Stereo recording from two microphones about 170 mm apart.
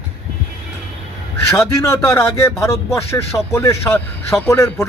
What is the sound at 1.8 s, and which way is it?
Speech, 15° left (ahead or behind).